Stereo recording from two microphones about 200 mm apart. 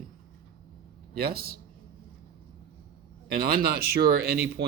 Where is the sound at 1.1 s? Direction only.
50° right (ahead or behind).